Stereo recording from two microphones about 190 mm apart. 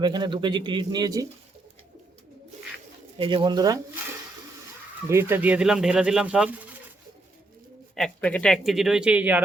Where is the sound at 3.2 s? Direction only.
25° right (ahead or behind).